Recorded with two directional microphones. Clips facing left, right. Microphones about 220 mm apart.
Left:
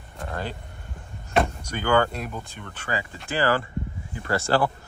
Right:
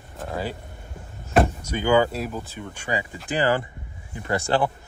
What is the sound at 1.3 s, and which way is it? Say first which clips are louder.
Speech: right 3 dB; 5° right (ahead or behind).